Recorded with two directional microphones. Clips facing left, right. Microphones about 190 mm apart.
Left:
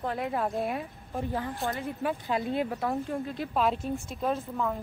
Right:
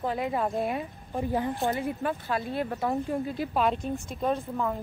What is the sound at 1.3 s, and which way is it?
Speech, 15° right (ahead or behind).